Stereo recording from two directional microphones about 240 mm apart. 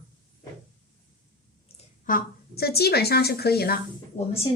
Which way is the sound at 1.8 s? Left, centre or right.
Left.